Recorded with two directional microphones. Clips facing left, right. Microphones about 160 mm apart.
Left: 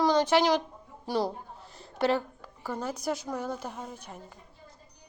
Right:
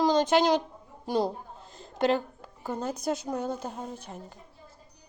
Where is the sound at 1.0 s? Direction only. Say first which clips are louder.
Right 2 dB; 20° right (ahead or behind).